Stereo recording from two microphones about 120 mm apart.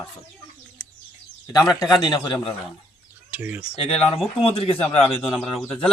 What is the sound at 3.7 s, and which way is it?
A man's voice, 50° left (ahead or behind).